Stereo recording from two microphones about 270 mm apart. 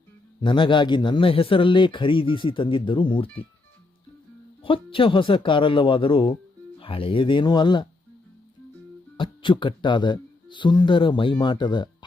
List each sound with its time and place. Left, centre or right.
0.4 s a man's voice: centre
4.6 s a man's voice: centre
9.1 s a man's voice: centre